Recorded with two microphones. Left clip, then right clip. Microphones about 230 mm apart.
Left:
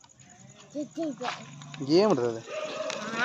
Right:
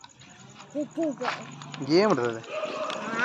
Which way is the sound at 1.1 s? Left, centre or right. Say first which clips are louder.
Right 4 dB; right.